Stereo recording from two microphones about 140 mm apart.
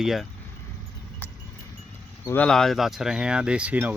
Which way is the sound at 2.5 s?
5° left (ahead or behind).